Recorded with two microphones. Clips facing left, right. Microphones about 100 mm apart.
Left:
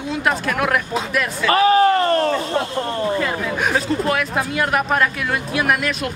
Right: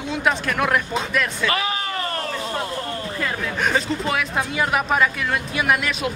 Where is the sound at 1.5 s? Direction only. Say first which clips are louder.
Left 11 dB; 40° left (ahead or behind).